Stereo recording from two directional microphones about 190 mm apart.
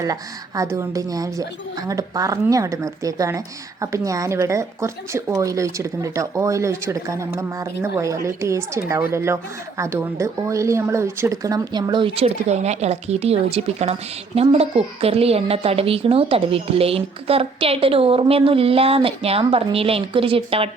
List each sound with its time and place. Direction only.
0.0 s a woman's voice: 20° right (ahead or behind)